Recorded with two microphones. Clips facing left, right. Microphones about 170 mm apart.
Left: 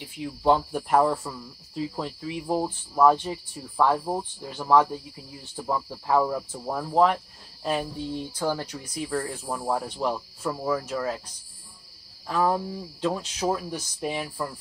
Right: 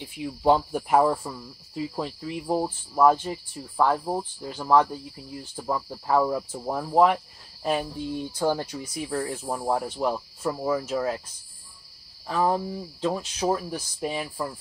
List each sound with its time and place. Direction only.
0.2 s speech: 15° right (ahead or behind)
12.3 s speech: 20° right (ahead or behind)